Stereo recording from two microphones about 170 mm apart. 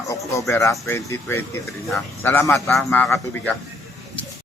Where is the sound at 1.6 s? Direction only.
Centre (ahead or behind).